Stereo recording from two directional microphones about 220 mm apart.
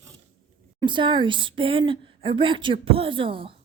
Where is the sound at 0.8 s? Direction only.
20° right (ahead or behind).